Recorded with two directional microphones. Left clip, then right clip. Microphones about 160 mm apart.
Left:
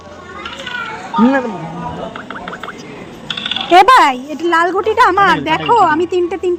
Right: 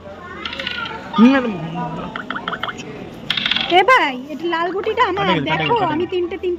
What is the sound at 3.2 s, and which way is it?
Coin, 15° right (ahead or behind).